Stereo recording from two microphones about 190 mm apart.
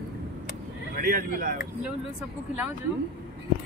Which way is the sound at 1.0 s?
50° right (ahead or behind).